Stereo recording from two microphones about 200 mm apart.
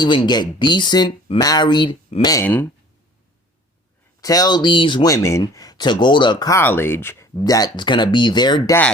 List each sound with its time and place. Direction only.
0.0 s speech: 20° left (ahead or behind)
2.3 s speech: 10° left (ahead or behind)
4.2 s speech: 20° left (ahead or behind)